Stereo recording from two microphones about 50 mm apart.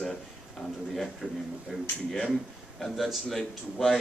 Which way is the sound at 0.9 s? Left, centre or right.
Centre.